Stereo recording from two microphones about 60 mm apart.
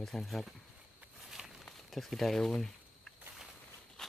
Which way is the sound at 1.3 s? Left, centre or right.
Centre.